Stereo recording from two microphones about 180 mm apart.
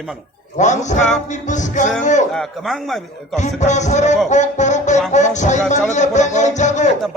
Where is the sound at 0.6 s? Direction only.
40° left (ahead or behind).